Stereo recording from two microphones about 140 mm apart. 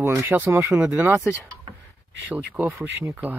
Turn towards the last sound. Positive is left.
turn(degrees=-10)  # may be behind; listen again after turning